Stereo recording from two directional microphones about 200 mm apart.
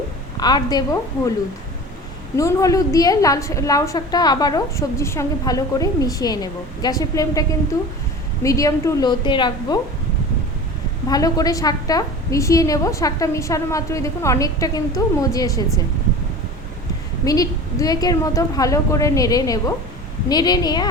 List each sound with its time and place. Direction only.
0.3 s a woman's voice: 20° left (ahead or behind)
2.3 s a woman's voice: 15° left (ahead or behind)
8.4 s a woman's voice: 15° left (ahead or behind)
11.1 s a woman's voice: 20° left (ahead or behind)
17.2 s a woman's voice: 20° left (ahead or behind)